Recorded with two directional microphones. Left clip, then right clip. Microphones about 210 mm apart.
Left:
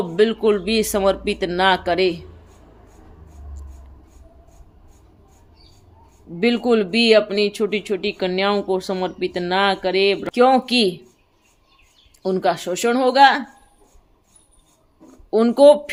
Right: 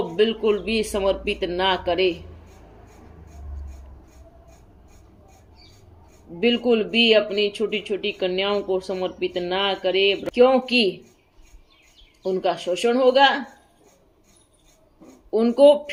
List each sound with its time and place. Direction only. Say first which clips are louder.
0.2 s speech: left 4 dB; 55° left (ahead or behind)
6.4 s speech: left 2 dB; 55° left (ahead or behind)
12.2 s speech: left 3 dB; 60° left (ahead or behind)
15.3 s speech: left 3 dB; 60° left (ahead or behind)